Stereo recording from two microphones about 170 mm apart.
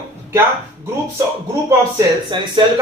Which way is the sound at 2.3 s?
30° right (ahead or behind).